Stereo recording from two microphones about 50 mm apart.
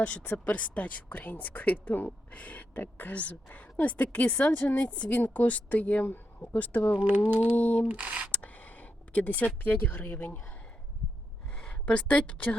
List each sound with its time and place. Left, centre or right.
0.0 s a woman's voice: left
2.0 s a woman's voice: left
7.0 s speech: right
7.5 s a woman's voice: left
7.9 s speech: right
8.3 s a sound: left
9.6 s a woman's voice: left
11.5 s a sound: centre
11.9 s a woman's voice: left